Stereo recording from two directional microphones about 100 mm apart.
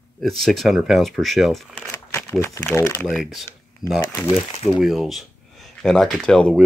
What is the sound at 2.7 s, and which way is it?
Speech, 25° left (ahead or behind).